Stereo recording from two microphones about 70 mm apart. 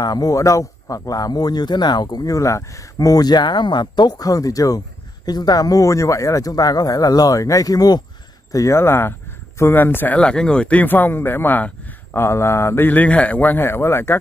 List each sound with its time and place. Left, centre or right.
0.0 s a man's voice: left
8.5 s speech: left
8.7 s a man's voice: left
10.1 s speech: centre
12.2 s a man's voice: left